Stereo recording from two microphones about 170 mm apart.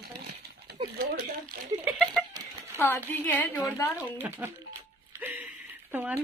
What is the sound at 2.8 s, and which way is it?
A woman's voice, 15° left (ahead or behind).